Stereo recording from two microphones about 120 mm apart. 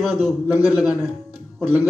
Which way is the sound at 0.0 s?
Centre (ahead or behind).